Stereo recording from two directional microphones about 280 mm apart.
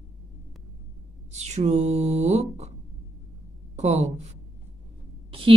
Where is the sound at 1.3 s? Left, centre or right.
Right.